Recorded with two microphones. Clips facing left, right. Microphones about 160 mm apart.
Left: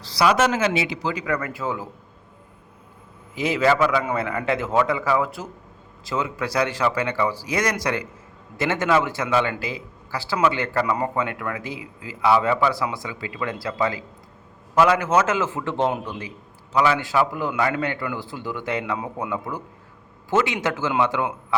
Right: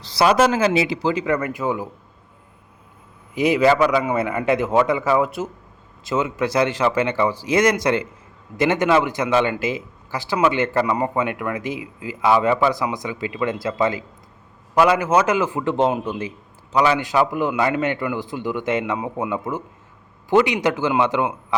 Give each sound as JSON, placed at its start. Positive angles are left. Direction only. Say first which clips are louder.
{"t": 0.0, "sound": "a man's voice", "louder": "right 3 dB", "side_deg": -25}
{"t": 3.3, "sound": "a man's voice", "louder": "right 4 dB", "side_deg": -15}
{"t": 14.8, "sound": "a man's voice", "louder": "right 2 dB", "side_deg": -10}